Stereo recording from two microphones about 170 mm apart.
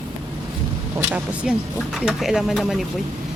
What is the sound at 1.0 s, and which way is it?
Speech, 10° right (ahead or behind).